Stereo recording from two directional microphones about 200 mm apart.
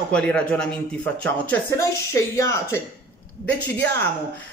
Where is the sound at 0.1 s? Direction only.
5° left (ahead or behind).